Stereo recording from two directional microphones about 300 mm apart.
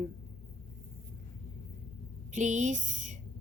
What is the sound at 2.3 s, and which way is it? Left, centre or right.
Speech, right.